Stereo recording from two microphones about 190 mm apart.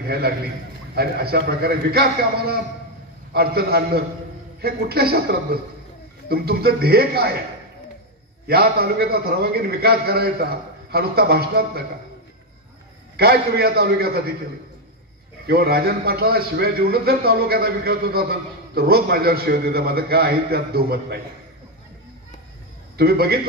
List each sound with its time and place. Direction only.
0.0 s a man's voice: 55° right (ahead or behind)
8.5 s a man's voice: 55° right (ahead or behind)
13.1 s a man's voice: 55° right (ahead or behind)
15.4 s a man's voice: 55° right (ahead or behind)
22.9 s a man's voice: 55° right (ahead or behind)